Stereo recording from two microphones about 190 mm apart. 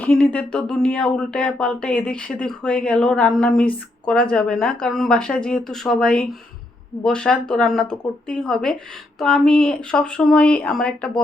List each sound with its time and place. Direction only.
0.0 s speech: 5° left (ahead or behind)